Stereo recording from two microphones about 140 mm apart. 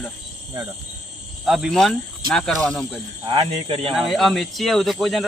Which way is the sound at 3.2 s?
30° right (ahead or behind).